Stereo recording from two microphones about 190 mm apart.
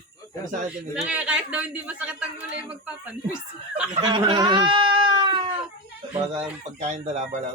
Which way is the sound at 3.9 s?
25° right (ahead or behind).